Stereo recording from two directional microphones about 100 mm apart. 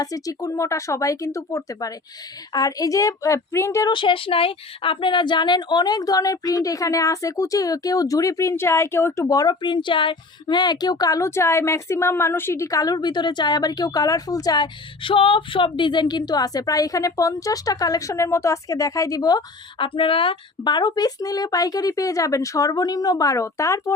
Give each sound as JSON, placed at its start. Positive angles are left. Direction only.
{"t": 0.0, "sound": "speech", "side_deg": 35}
{"t": 3.8, "sound": "speech", "side_deg": 55}
{"t": 19.8, "sound": "speech", "side_deg": 60}